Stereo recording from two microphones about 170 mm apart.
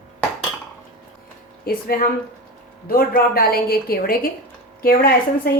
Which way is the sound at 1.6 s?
60° left (ahead or behind).